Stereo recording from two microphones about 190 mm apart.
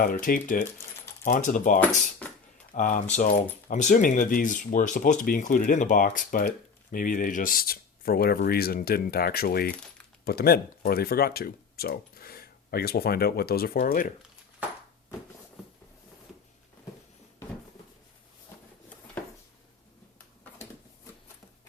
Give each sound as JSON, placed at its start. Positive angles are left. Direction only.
{"t": 0.0, "sound": "speech", "side_deg": 45}